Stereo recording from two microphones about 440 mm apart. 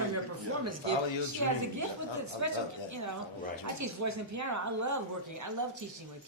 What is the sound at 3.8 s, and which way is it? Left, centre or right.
Speech, right.